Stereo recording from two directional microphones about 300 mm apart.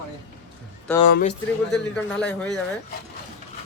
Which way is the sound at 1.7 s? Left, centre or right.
Centre.